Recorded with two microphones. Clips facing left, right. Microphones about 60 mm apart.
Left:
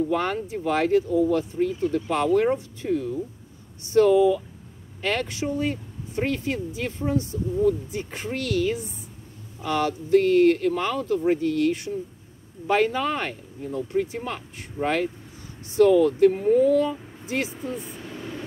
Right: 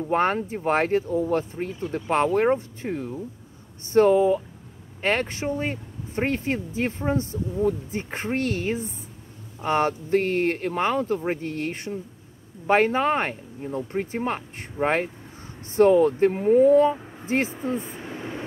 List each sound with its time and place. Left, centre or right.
0.1 s speech: right